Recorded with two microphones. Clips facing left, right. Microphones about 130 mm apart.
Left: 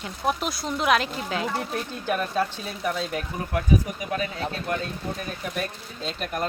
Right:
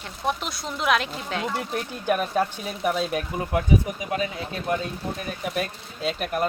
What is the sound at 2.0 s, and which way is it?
Speech, 15° right (ahead or behind).